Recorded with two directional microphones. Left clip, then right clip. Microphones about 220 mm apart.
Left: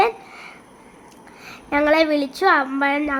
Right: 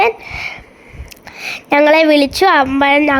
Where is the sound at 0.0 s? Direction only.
40° right (ahead or behind).